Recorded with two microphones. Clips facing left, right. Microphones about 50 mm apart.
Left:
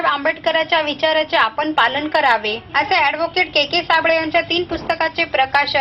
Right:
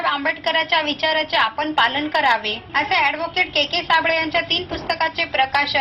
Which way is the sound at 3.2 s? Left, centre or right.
Left.